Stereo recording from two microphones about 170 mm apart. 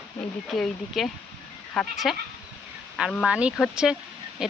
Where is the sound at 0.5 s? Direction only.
Centre (ahead or behind).